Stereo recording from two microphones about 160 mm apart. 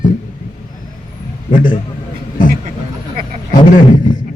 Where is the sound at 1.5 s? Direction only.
55° left (ahead or behind).